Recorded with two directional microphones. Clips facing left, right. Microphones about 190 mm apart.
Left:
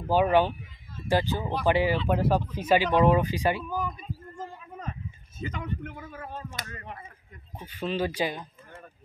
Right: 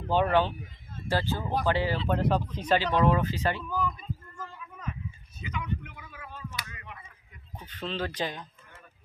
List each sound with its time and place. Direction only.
0.0 s speech: 10° left (ahead or behind)
4.6 s a sound: 40° left (ahead or behind)
5.4 s speech: 45° left (ahead or behind)
7.5 s speech: 10° left (ahead or behind)